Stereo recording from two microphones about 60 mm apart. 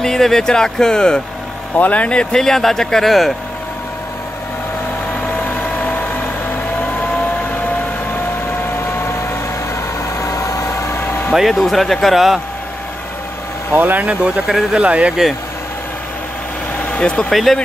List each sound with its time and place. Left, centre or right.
0.0 s speech: centre
1.8 s speech: left; by 3.3 s centre
5.2 s vehicle: left
8.9 s vehicle: left
10.1 s vehicle: left
11.0 s vehicle: left
11.3 s speech: centre
13.7 s speech: right
16.9 s speech: centre
17.3 s speech: centre